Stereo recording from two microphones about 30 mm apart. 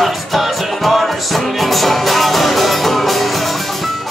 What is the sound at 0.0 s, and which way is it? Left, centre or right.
Music, centre.